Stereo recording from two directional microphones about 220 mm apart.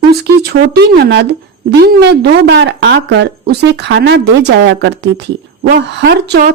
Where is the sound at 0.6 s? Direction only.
50° right (ahead or behind).